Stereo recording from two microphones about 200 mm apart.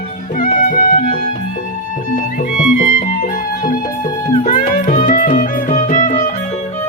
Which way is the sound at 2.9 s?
40° left (ahead or behind).